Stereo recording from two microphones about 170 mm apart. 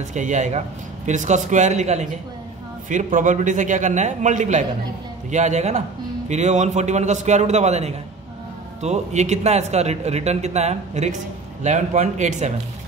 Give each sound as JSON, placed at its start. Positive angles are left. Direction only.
{"t": 0.1, "sound": "a man's voice", "side_deg": -45}